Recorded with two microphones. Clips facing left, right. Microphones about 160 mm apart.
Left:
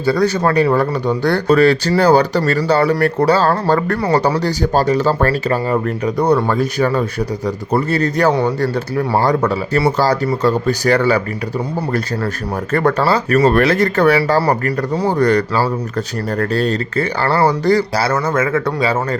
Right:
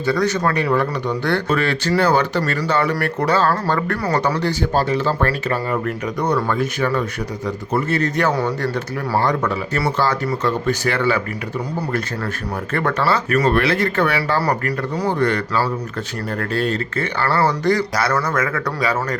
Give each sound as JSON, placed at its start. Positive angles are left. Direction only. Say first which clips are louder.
{"t": 0.0, "sound": "speech", "louder": "left 4 dB", "side_deg": 35}
{"t": 12.7, "sound": "speech", "louder": "left 5 dB", "side_deg": 35}